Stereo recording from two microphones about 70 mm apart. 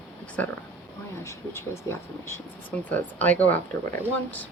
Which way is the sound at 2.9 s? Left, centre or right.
Left.